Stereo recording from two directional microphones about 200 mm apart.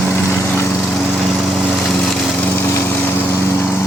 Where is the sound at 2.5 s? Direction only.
10° left (ahead or behind).